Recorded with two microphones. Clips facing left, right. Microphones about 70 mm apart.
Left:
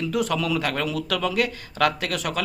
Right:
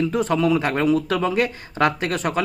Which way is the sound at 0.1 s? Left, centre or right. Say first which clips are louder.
Right 5 dB; right.